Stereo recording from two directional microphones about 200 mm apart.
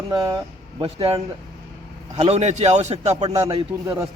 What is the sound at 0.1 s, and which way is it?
A man's voice, 20° right (ahead or behind).